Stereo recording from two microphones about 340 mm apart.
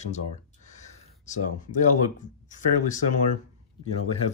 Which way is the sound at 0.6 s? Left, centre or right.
Left.